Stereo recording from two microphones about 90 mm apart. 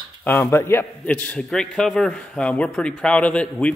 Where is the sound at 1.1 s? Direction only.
10° left (ahead or behind).